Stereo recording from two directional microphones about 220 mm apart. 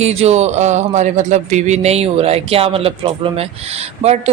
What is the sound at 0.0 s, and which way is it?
Speech, 30° right (ahead or behind).